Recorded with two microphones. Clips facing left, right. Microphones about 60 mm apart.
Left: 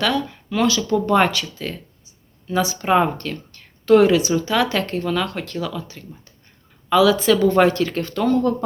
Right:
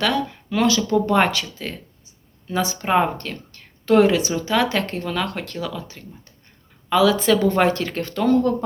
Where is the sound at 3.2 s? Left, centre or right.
Right.